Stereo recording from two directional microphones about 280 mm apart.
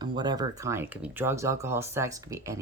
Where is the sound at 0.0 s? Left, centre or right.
Centre.